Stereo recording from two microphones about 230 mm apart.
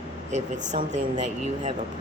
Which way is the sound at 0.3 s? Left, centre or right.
Right.